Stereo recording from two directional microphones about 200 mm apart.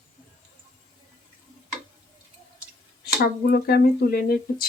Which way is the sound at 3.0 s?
50° left (ahead or behind).